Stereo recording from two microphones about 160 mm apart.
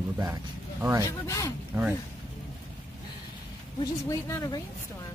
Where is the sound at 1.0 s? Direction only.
20° left (ahead or behind).